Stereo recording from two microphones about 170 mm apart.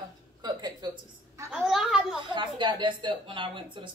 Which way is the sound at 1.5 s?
Centre (ahead or behind).